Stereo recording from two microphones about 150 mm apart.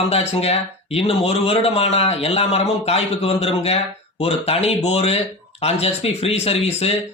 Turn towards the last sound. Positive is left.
turn(degrees=40)  # may be behind; listen again after turning